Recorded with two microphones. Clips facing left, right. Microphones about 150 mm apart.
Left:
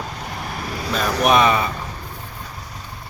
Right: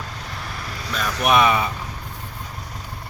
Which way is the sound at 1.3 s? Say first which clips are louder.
Even; 5° right (ahead or behind).